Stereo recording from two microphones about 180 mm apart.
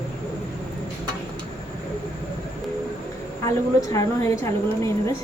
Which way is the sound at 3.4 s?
20° left (ahead or behind).